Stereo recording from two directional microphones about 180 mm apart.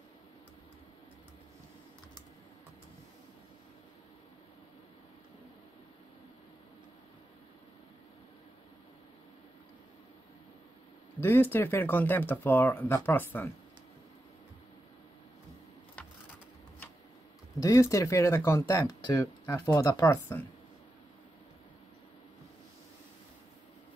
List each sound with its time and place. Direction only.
11.1 s speech: 10° left (ahead or behind)
17.6 s speech: 20° left (ahead or behind)